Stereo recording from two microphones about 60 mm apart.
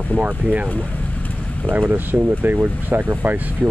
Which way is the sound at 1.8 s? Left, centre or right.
Right.